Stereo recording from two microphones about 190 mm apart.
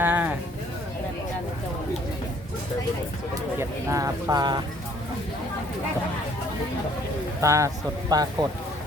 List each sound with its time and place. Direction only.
0.0 s a sound: 10° right (ahead or behind)
3.6 s speech: 15° right (ahead or behind)
7.4 s speech: 15° right (ahead or behind)